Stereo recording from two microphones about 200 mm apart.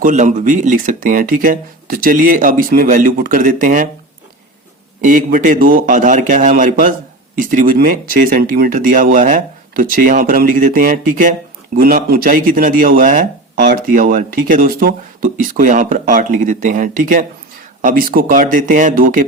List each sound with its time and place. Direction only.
0.0 s speech: 40° right (ahead or behind)
4.9 s a man's voice: 40° right (ahead or behind)